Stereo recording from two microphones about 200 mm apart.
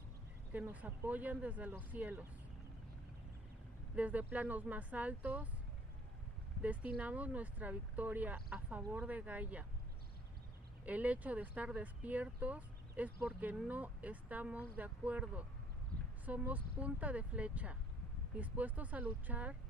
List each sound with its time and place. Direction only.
0.5 s speech: 10° right (ahead or behind)
3.9 s speech: 5° right (ahead or behind)
6.6 s speech: 5° right (ahead or behind)
10.9 s speech: 5° right (ahead or behind)
15.9 s a sound: 50° right (ahead or behind)
16.3 s speech: 10° right (ahead or behind)